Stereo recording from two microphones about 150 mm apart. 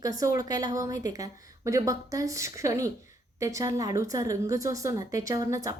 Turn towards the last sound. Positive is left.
turn(degrees=-20)  # may be behind; listen again after turning